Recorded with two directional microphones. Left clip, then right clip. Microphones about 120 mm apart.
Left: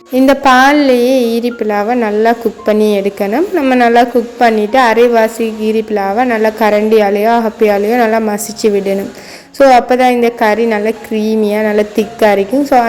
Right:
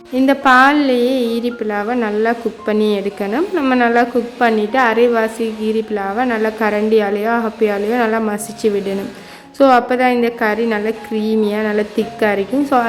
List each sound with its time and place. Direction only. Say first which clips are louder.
0.1 s a woman's voice: left 4 dB; 30° left (ahead or behind)
3.6 s a woman's voice: left 5 dB; 10° left (ahead or behind)
3.8 s a woman's voice: left 6 dB; 20° left (ahead or behind)